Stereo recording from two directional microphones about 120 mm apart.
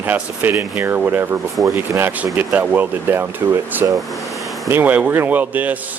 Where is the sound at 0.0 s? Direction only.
15° right (ahead or behind).